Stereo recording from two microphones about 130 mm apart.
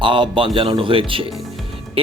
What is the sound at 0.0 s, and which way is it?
Speech, 40° right (ahead or behind).